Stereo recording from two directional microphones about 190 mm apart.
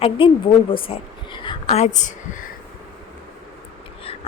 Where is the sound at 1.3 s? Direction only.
25° left (ahead or behind); by 2.5 s 40° left (ahead or behind).